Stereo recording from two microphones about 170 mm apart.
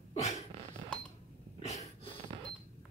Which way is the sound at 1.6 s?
40° left (ahead or behind).